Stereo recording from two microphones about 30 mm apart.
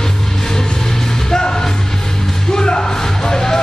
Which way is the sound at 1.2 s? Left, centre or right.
Left.